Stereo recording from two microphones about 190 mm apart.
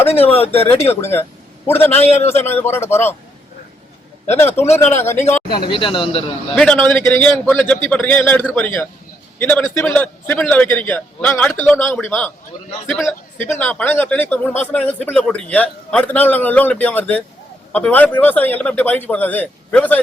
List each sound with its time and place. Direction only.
0.3 s speech: 30° left (ahead or behind)
1.6 s speech: 10° left (ahead or behind)
2.0 s speech: 35° left (ahead or behind)
2.2 s speech: 10° left (ahead or behind)
4.4 s speech: 10° left (ahead or behind)
4.6 s speech: 35° left (ahead or behind)
4.9 s speech: 15° left (ahead or behind)
5.5 s speech: 25° left (ahead or behind)
6.6 s a man's voice: 5° left (ahead or behind)